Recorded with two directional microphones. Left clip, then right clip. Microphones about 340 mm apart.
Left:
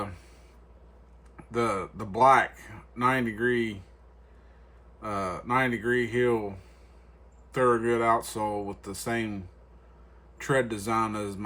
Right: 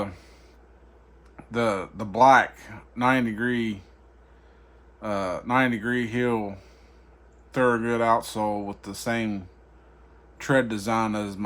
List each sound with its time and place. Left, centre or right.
1.5 s speech: right
4.9 s speech: right
7.5 s speech: right